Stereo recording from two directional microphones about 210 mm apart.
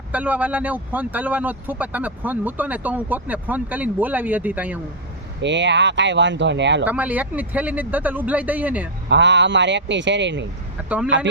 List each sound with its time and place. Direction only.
0.1 s speech: 5° right (ahead or behind)
5.4 s speech: 60° right (ahead or behind)
6.8 s speech: 5° right (ahead or behind)
9.0 s speech: 55° right (ahead or behind)
10.8 s speech: 5° right (ahead or behind)